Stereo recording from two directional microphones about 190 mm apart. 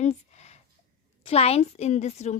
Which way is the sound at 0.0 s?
35° left (ahead or behind).